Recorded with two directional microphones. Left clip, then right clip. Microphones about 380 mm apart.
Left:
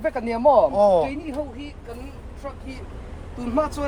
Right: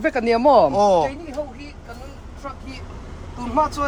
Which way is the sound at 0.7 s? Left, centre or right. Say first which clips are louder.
Right 1 dB; centre.